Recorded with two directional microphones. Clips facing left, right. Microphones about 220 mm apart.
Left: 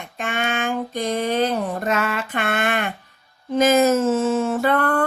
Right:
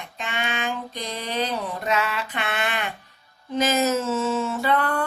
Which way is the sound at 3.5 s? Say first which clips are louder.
Left 6 dB; 50° left (ahead or behind).